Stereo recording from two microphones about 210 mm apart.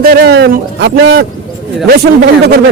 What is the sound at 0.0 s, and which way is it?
A man's voice, 50° right (ahead or behind).